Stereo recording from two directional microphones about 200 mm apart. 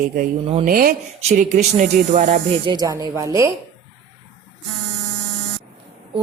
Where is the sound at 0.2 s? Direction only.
40° right (ahead or behind).